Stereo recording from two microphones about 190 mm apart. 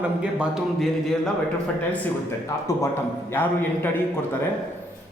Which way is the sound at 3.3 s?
10° left (ahead or behind).